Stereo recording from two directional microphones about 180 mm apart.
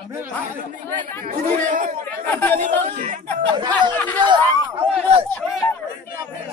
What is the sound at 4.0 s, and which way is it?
Speech, 10° left (ahead or behind).